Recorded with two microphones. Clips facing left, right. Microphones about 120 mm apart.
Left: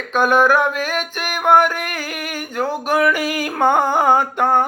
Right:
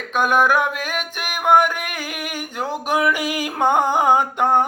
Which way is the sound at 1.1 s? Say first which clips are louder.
Left 3 dB; 10° right (ahead or behind).